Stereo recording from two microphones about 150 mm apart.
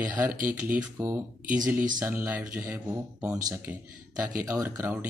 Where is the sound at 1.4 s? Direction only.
60° right (ahead or behind).